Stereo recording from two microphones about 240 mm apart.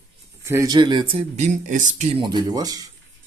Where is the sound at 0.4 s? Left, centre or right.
Centre.